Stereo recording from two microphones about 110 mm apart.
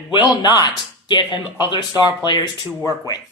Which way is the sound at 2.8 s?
30° left (ahead or behind).